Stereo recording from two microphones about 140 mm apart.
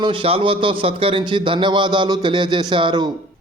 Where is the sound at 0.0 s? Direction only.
40° right (ahead or behind).